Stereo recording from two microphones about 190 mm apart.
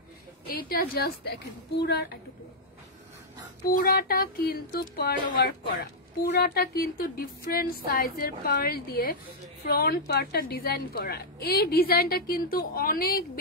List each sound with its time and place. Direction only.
0.5 s a woman's voice: 55° left (ahead or behind)
3.6 s a woman's voice: 50° left (ahead or behind)